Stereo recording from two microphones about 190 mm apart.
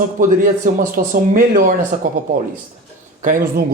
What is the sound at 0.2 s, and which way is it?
Speech, 45° right (ahead or behind).